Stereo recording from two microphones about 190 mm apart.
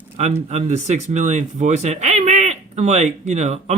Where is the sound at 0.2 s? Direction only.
35° right (ahead or behind).